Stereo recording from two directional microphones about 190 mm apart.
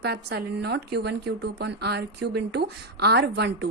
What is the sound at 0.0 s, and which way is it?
A woman's voice, 60° right (ahead or behind).